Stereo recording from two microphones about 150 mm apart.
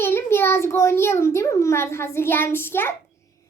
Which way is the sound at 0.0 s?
15° left (ahead or behind).